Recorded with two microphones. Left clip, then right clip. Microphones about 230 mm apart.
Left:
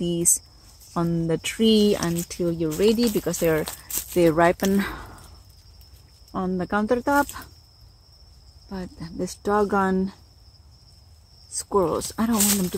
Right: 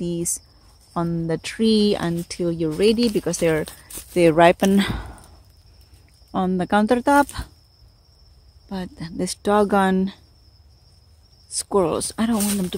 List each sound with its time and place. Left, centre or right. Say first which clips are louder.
0.9 s speech: even; centre; by 5.2 s right
6.3 s speech: right 5 dB; right
8.6 s speech: right 4 dB; right
11.5 s speech: right 2 dB; right